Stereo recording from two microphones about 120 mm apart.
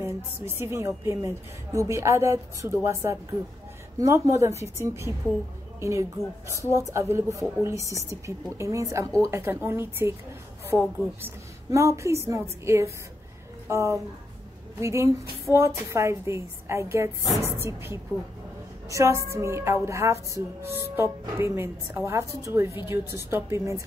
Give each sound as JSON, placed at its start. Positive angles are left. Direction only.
{"t": 0.0, "sound": "a woman's voice", "side_deg": -20}
{"t": 11.2, "sound": "a woman's voice", "side_deg": -25}